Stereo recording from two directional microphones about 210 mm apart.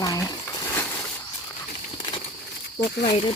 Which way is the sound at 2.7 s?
50° left (ahead or behind).